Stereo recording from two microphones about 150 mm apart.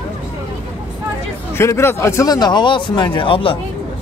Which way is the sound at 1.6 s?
15° left (ahead or behind).